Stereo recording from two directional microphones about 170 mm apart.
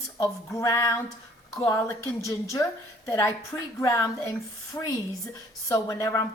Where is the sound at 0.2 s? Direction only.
15° left (ahead or behind).